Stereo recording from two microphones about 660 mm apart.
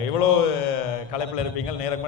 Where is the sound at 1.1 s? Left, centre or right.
Left.